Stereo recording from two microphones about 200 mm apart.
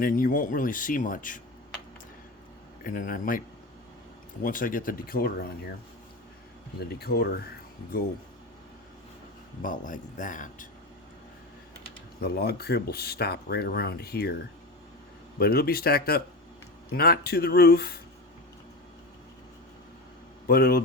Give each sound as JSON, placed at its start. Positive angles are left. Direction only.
{"t": 0.0, "sound": "speech", "side_deg": 45}
{"t": 2.8, "sound": "speech", "side_deg": 45}
{"t": 4.4, "sound": "speech", "side_deg": 45}
{"t": 6.7, "sound": "speech", "side_deg": 50}
{"t": 9.6, "sound": "speech", "side_deg": 40}
{"t": 12.2, "sound": "speech", "side_deg": 55}
{"t": 15.4, "sound": "speech", "side_deg": 50}
{"t": 20.5, "sound": "speech", "side_deg": 50}